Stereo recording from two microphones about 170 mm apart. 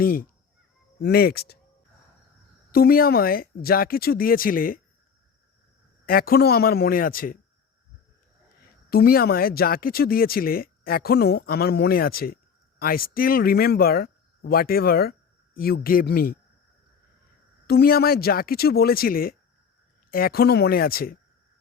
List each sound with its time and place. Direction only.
0.0 s speech: 60° left (ahead or behind)
2.7 s speech: 60° left (ahead or behind)
6.1 s speech: 60° left (ahead or behind)
8.9 s speech: 60° left (ahead or behind)
17.7 s speech: 65° left (ahead or behind)